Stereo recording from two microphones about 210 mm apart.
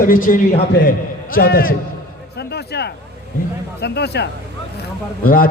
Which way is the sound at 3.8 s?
50° left (ahead or behind).